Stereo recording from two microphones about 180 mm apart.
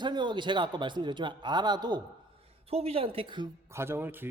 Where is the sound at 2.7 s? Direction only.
35° right (ahead or behind); by 4.3 s 10° right (ahead or behind).